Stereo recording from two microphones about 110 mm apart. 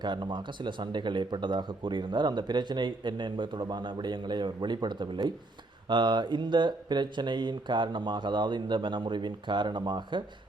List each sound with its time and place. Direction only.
0.0 s speech: 45° right (ahead or behind)